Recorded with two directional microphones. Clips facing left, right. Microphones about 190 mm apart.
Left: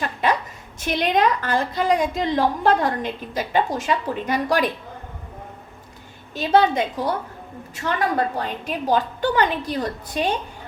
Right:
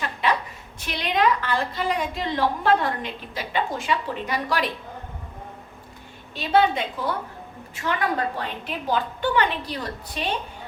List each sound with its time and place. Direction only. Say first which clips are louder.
0.9 s a woman's voice: left 3 dB; 45° left (ahead or behind)
6.3 s a woman's voice: left 3 dB; 45° left (ahead or behind)